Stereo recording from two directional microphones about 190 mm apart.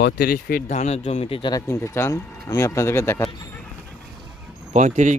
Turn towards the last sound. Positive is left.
turn(degrees=-40)  # may be behind; listen again after turning